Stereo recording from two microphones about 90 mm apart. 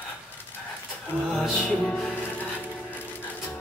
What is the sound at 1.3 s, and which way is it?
Music, 5° left (ahead or behind).